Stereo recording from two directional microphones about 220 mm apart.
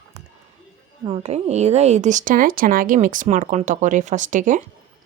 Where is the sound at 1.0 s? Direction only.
25° right (ahead or behind).